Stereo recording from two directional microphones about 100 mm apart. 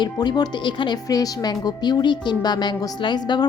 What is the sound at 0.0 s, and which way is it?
A woman's voice, 45° left (ahead or behind).